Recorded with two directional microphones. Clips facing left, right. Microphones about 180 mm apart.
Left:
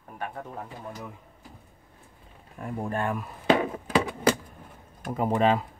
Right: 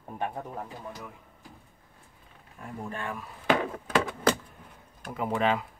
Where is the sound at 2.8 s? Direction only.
50° left (ahead or behind).